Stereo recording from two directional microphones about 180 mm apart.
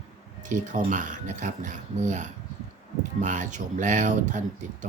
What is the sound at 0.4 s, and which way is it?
Speech, 45° right (ahead or behind).